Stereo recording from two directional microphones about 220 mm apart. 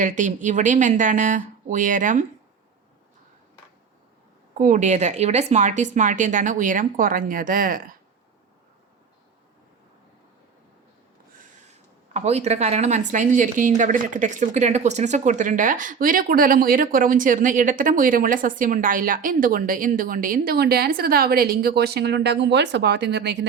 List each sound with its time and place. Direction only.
0.0 s a woman's voice: 35° right (ahead or behind)
4.5 s a woman's voice: 35° right (ahead or behind)
12.1 s a woman's voice: 30° right (ahead or behind); by 23.5 s 50° right (ahead or behind)